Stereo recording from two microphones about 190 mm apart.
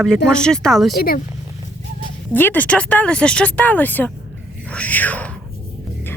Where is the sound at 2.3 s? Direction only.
10° left (ahead or behind).